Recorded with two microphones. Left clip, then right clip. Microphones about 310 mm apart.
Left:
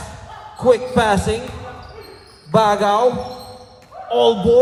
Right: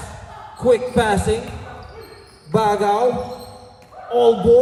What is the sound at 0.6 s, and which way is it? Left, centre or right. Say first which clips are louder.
Music: left 2 dB; left.